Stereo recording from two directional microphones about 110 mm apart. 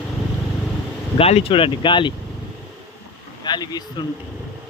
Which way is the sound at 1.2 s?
65° left (ahead or behind).